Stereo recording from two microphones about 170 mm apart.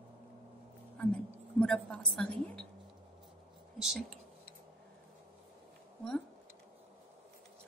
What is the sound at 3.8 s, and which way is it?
Speech, centre (ahead or behind).